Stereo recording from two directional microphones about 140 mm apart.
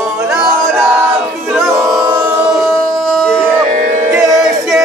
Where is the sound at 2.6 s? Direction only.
5° left (ahead or behind).